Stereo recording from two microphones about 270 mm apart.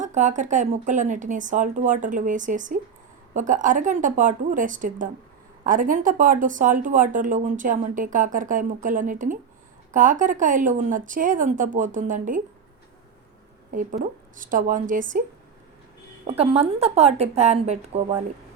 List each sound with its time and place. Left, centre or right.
0.0 s speech: right
13.7 s speech: right
16.4 s speech: right